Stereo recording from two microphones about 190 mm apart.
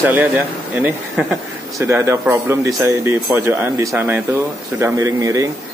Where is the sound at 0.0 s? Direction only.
10° right (ahead or behind).